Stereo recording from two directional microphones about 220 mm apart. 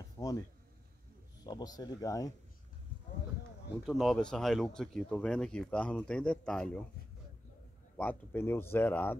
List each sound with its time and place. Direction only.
0.2 s a sound: 15° left (ahead or behind)
1.4 s speech: 15° left (ahead or behind)
3.8 s speech: centre (ahead or behind)
8.0 s speech: 10° left (ahead or behind)